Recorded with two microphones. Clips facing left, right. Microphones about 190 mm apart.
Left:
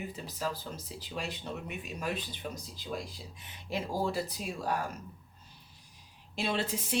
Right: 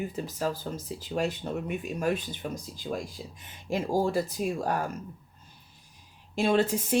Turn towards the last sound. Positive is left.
turn(degrees=-50)  # may be behind; listen again after turning